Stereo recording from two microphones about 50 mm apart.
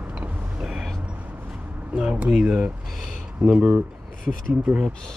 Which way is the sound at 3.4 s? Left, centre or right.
Centre.